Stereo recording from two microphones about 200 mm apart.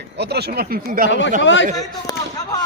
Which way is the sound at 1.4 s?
65° left (ahead or behind).